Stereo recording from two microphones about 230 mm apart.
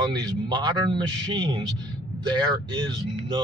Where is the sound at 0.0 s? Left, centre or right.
Centre.